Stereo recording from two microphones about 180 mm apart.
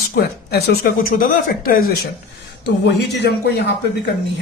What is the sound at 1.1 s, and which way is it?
Speech, 50° left (ahead or behind).